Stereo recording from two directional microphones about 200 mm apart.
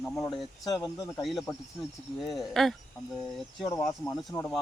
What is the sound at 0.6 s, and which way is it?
Speech, 20° left (ahead or behind).